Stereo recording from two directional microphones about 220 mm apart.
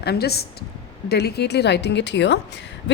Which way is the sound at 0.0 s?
45° left (ahead or behind).